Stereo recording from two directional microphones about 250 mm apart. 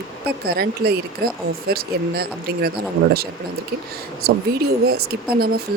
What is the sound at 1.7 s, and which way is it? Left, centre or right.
Speech, right.